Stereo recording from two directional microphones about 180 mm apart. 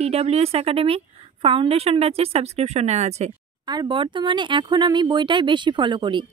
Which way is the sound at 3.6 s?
25° right (ahead or behind).